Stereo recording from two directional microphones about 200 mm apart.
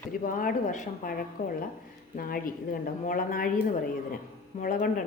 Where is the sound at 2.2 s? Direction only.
45° left (ahead or behind).